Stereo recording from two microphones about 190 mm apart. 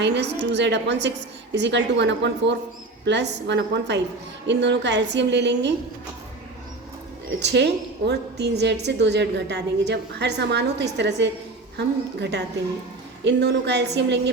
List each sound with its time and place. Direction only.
0.0 s a woman's voice: 65° right (ahead or behind)
7.3 s a woman's voice: 65° right (ahead or behind)